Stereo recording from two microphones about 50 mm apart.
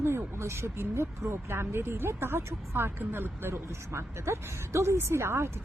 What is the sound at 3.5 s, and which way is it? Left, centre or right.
Speech, right.